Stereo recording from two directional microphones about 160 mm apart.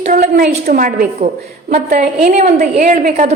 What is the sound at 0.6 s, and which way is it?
A woman's voice, 65° right (ahead or behind).